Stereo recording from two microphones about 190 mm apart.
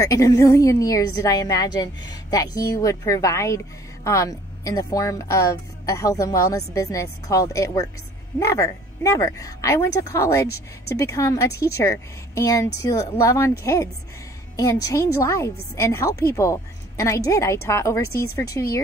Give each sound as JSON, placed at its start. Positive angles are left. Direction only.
{"t": 0.0, "sound": "a woman's voice", "side_deg": 15}